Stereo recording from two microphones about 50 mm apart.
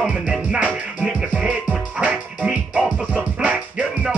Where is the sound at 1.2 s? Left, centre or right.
Centre.